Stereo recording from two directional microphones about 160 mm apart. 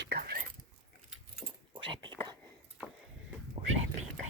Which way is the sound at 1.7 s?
30° right (ahead or behind).